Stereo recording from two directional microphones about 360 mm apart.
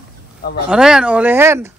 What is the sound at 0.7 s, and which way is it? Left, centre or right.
Speech, centre.